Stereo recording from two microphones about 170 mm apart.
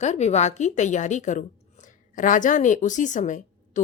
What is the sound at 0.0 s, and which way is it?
A woman's voice, 40° left (ahead or behind).